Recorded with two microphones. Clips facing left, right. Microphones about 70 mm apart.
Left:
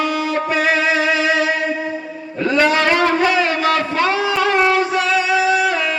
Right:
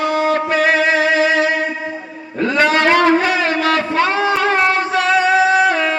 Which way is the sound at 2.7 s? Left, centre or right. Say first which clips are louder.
Right 3 dB; right.